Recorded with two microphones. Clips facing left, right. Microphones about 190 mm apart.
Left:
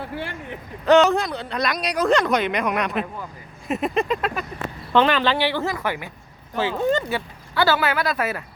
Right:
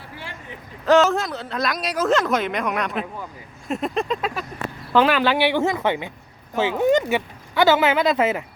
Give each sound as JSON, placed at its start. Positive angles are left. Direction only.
{"t": 0.9, "sound": "speech", "side_deg": 0}